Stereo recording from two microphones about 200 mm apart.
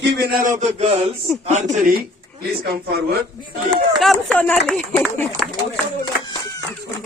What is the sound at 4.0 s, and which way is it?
Speech, centre (ahead or behind).